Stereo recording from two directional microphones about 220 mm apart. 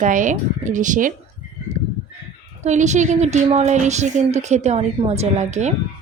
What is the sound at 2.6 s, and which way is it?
A woman's voice, 30° right (ahead or behind).